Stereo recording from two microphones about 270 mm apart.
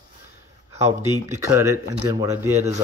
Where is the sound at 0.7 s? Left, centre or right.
Centre.